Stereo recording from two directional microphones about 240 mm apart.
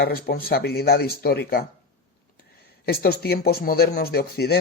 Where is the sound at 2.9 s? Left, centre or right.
Left.